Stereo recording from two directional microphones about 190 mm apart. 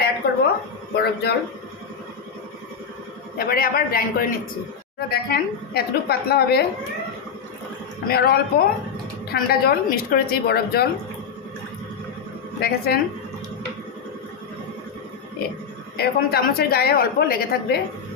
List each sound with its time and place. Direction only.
0.2 s a sound: 55° left (ahead or behind)
0.9 s a woman's voice: 55° left (ahead or behind)
3.3 s a woman's voice: 50° left (ahead or behind)
8.0 s a woman's voice: 55° left (ahead or behind)
12.5 s a woman's voice: 55° left (ahead or behind)
16.0 s a woman's voice: 55° left (ahead or behind)